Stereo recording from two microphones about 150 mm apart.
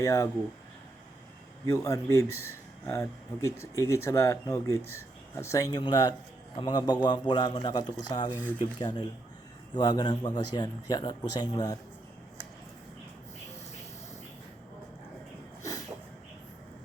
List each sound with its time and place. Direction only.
0.0 s speech: 20° left (ahead or behind)
1.7 s speech: 20° left (ahead or behind)
15.6 s a sound: 20° left (ahead or behind)